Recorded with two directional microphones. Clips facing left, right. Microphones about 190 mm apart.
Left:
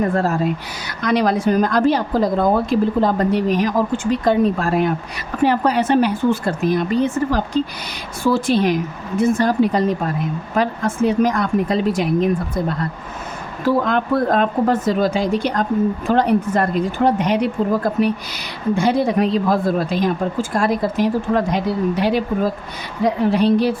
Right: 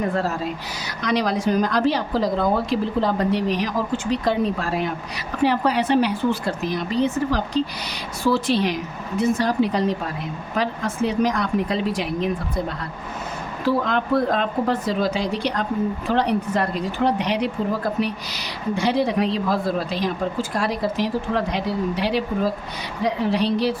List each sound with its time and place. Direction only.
0.1 s a woman's voice: 50° left (ahead or behind)
13.7 s a woman's voice: 50° left (ahead or behind)